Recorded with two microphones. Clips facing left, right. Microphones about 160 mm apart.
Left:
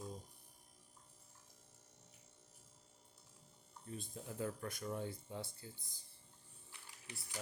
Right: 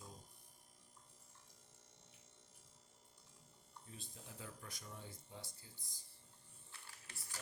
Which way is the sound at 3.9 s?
50° left (ahead or behind).